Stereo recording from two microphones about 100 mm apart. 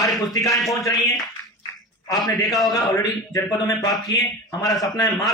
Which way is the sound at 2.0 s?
Centre (ahead or behind).